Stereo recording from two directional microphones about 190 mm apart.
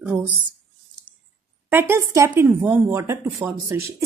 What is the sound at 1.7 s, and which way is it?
A woman's voice, 10° right (ahead or behind).